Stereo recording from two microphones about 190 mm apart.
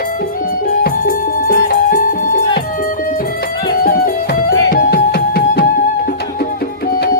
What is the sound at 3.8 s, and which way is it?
Music, 50° left (ahead or behind).